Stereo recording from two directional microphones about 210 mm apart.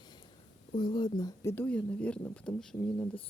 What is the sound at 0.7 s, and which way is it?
Speech, 20° left (ahead or behind).